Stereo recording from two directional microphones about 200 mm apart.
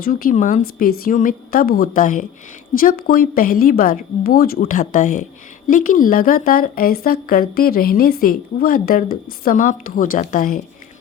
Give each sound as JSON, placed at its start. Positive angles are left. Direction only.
{"t": 0.0, "sound": "speech", "side_deg": 45}